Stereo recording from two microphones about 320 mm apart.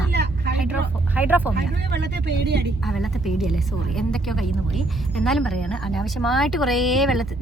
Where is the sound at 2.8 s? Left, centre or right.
Centre.